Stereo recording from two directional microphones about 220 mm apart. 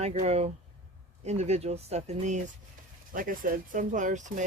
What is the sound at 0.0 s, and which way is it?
Speech, 30° right (ahead or behind).